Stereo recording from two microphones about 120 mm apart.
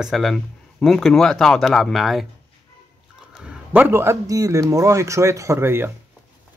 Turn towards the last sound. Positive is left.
turn(degrees=-20)  # may be behind; listen again after turning